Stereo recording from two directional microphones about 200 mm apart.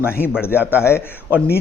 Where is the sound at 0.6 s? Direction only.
10° left (ahead or behind).